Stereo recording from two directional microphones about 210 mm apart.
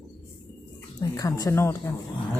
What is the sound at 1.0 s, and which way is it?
Speech, 15° left (ahead or behind).